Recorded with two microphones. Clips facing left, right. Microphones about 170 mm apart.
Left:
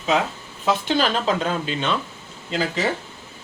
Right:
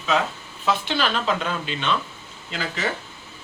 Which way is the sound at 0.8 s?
40° left (ahead or behind).